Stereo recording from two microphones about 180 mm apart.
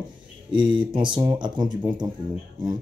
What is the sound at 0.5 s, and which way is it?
Speech, 25° right (ahead or behind).